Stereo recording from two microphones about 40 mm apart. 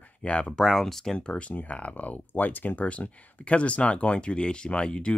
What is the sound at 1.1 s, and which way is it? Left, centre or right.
Speech, left.